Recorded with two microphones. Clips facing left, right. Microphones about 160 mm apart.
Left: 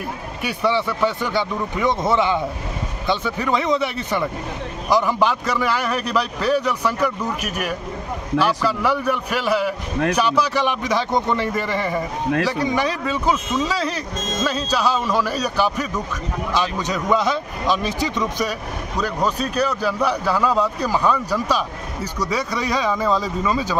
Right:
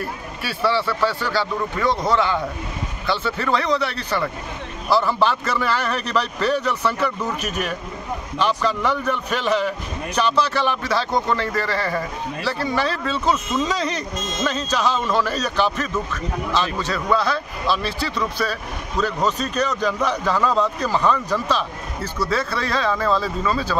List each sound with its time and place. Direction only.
0.4 s speech: 20° left (ahead or behind)